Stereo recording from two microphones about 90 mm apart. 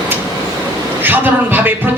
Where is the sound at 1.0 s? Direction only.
20° right (ahead or behind).